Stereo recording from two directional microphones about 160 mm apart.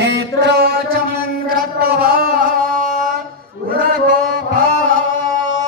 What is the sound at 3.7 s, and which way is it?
Chant, 65° right (ahead or behind).